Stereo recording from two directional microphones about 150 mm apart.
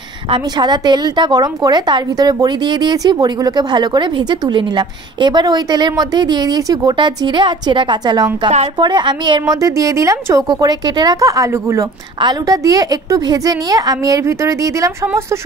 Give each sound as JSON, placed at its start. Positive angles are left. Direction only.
{"t": 0.3, "sound": "a woman's voice", "side_deg": -30}